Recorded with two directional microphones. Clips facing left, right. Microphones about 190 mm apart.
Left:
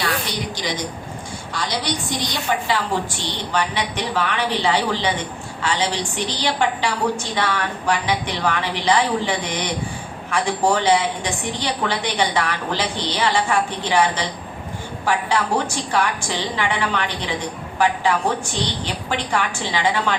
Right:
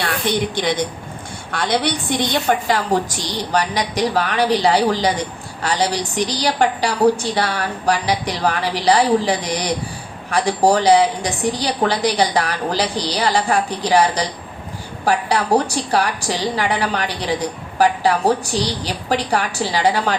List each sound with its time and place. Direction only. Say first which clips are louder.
0.3 s a woman's voice: right 7 dB; 60° right (ahead or behind); by 20.1 s 40° right (ahead or behind)